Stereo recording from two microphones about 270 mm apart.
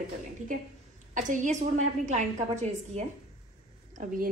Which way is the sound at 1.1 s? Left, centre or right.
Right.